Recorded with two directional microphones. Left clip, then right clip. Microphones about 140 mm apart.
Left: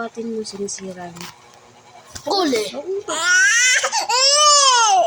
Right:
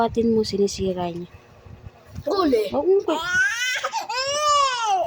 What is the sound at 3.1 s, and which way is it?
Crying, 5° left (ahead or behind).